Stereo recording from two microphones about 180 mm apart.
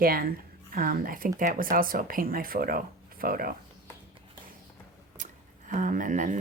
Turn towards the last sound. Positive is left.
turn(degrees=-45)  # may be behind; listen again after turning